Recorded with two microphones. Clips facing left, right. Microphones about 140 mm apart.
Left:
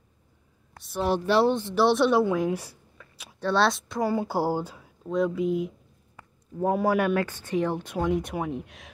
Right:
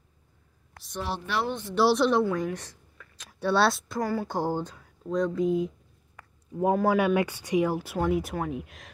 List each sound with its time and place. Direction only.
1.2 s speech: 30° left (ahead or behind)
1.8 s speech: centre (ahead or behind)
3.3 s speech: 5° right (ahead or behind)
4.0 s speech: 20° left (ahead or behind)
4.3 s speech: 10° left (ahead or behind)
6.7 s speech: 5° left (ahead or behind)
7.2 s speech: 15° right (ahead or behind)